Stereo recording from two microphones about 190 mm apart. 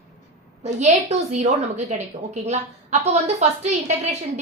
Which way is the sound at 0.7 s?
35° right (ahead or behind).